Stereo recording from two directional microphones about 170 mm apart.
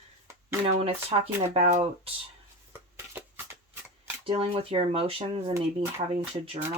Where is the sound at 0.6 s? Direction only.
35° right (ahead or behind).